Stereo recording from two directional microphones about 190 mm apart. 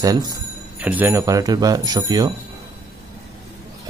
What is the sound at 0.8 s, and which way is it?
Speech, 10° right (ahead or behind).